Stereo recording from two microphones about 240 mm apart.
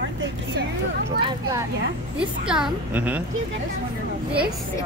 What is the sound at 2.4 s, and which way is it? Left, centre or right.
Speech, centre.